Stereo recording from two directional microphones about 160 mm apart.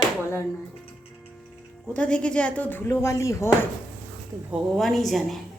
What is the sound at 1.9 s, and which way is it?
Speech, 5° left (ahead or behind).